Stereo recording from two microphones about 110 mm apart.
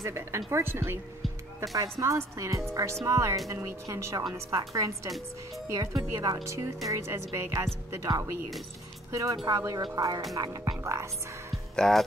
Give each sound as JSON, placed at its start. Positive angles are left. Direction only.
{"t": 0.0, "sound": "speech", "side_deg": -25}
{"t": 5.7, "sound": "music", "side_deg": -35}
{"t": 6.9, "sound": "speech", "side_deg": -25}
{"t": 9.4, "sound": "music", "side_deg": -35}
{"t": 11.7, "sound": "speech", "side_deg": 5}